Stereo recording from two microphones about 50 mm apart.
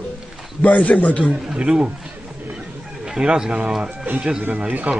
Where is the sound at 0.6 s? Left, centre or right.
Left.